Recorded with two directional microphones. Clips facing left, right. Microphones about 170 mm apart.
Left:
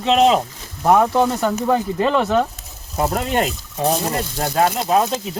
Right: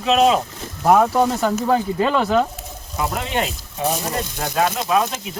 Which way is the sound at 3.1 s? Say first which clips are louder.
Left 3 dB; 40° left (ahead or behind).